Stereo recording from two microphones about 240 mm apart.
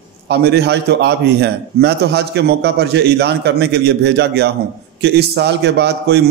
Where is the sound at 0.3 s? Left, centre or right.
Right.